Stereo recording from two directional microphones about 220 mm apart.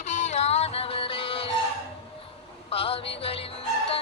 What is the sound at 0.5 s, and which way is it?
Music, 25° left (ahead or behind).